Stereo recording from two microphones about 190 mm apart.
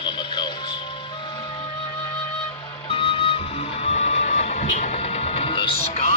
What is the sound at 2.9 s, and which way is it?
Music, 30° left (ahead or behind).